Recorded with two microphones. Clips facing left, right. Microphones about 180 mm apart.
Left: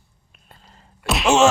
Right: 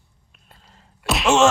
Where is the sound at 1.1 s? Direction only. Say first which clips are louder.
Left 1 dB; centre (ahead or behind).